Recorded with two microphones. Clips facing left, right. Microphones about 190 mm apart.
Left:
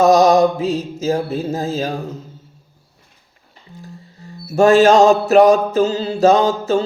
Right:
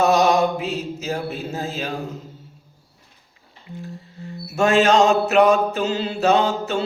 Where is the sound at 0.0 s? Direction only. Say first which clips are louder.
Left 5 dB; 40° left (ahead or behind).